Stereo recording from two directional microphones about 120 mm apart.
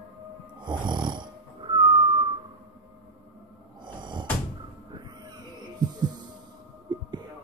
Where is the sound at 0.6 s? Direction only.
40° right (ahead or behind).